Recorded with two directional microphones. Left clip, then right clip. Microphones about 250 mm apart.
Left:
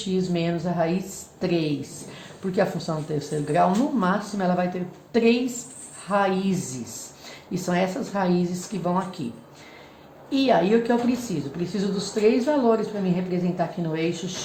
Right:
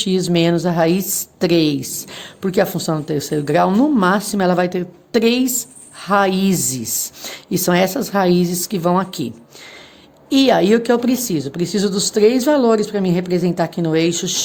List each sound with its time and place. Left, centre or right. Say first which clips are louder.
0.0 s a woman's voice: right 9 dB; right
10.2 s a woman's voice: right 7 dB; right